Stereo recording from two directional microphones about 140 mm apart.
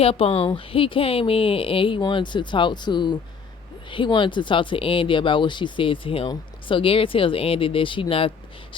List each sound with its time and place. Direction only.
0.0 s speech: 45° left (ahead or behind)